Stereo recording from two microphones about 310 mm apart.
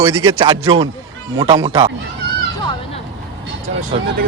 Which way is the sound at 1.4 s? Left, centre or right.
Right.